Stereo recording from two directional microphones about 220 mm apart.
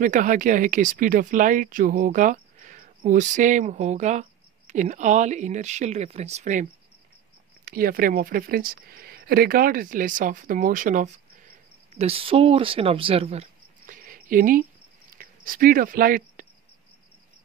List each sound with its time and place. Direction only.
0.0 s speech: 35° right (ahead or behind)